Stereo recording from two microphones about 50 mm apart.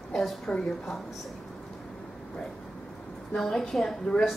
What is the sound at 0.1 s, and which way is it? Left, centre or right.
Speech, centre.